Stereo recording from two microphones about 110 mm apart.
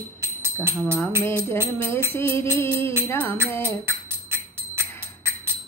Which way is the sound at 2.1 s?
20° left (ahead or behind).